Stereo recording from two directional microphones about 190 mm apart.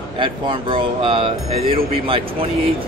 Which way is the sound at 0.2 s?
25° right (ahead or behind).